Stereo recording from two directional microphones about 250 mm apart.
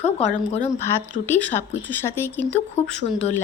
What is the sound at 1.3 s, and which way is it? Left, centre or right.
Speech, centre.